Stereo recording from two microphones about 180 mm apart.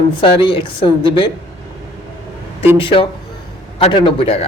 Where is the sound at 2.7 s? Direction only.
30° left (ahead or behind).